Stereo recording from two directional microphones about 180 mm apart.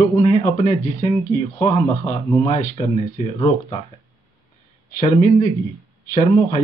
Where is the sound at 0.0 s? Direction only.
35° left (ahead or behind).